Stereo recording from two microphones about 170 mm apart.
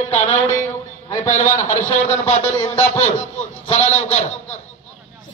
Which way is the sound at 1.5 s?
50° left (ahead or behind).